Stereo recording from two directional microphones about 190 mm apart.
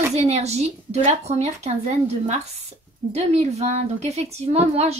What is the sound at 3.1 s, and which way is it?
A woman's voice, 35° right (ahead or behind).